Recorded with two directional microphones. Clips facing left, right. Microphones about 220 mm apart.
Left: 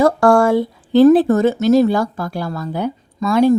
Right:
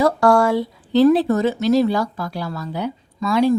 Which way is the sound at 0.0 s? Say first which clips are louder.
Left 3 dB; 50° left (ahead or behind).